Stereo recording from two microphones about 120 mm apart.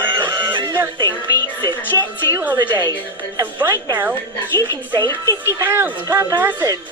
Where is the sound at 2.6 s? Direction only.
35° right (ahead or behind).